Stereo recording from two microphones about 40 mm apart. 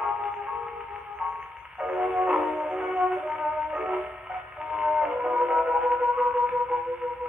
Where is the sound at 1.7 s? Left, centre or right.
Right.